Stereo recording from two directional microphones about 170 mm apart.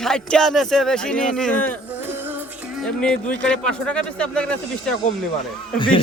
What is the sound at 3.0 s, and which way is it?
Speech, 5° left (ahead or behind).